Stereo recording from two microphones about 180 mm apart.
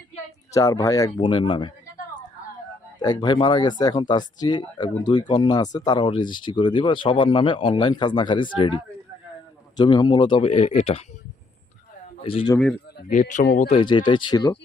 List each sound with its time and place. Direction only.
0.5 s speech: 15° left (ahead or behind)
3.0 s speech: 25° left (ahead or behind)
12.2 s speech: 30° left (ahead or behind)
13.1 s speech: 45° left (ahead or behind)
13.6 s speech: 30° left (ahead or behind)